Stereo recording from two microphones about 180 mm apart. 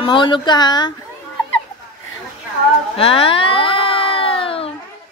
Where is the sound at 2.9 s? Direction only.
30° left (ahead or behind).